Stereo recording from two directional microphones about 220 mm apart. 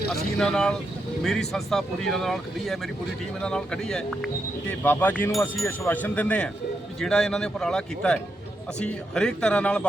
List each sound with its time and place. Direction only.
0.1 s speech: centre (ahead or behind)